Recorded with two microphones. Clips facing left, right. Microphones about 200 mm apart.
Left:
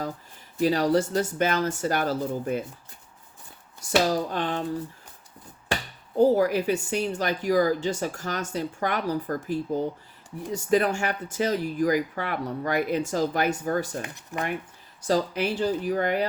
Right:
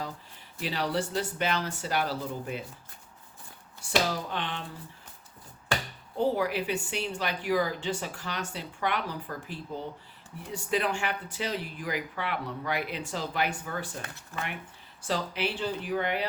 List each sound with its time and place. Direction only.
0.6 s a woman's voice: 45° left (ahead or behind)
4.1 s speech: 40° left (ahead or behind)
6.1 s a woman's voice: 40° left (ahead or behind)
14.0 s speech: 15° left (ahead or behind)
15.0 s speech: 40° left (ahead or behind)